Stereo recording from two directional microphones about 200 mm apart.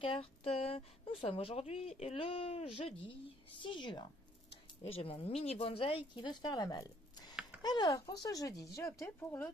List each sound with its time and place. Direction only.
0.0 s speech: 30° left (ahead or behind); by 9.5 s 10° left (ahead or behind)